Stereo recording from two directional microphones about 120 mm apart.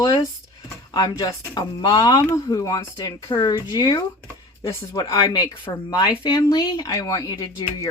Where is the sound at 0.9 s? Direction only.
35° left (ahead or behind).